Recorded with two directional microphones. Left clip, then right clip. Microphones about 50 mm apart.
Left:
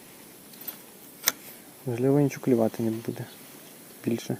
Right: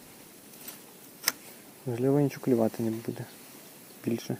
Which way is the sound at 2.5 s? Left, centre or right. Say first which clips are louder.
Left 2 dB; centre.